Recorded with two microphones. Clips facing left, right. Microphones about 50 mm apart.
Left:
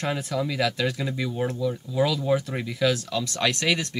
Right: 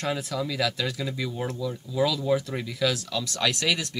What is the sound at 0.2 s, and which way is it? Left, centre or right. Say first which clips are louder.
Speech: left 2 dB; centre.